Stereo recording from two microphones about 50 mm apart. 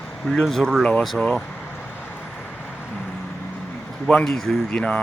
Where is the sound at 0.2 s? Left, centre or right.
Centre.